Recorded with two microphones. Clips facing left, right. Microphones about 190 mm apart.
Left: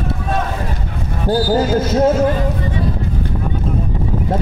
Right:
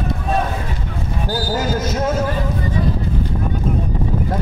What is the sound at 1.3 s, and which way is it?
Speech, 30° left (ahead or behind).